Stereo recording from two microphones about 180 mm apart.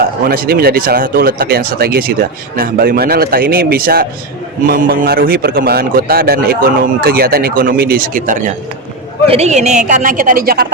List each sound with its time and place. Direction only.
0.3 s a man's voice: 55° right (ahead or behind)